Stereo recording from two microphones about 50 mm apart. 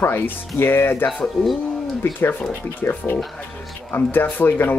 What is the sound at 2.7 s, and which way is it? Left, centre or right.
Speech, left.